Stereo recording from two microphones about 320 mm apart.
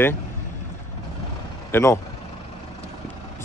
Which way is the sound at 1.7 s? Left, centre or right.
Centre.